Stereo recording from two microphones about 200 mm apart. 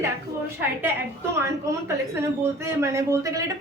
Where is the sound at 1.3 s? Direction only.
15° right (ahead or behind).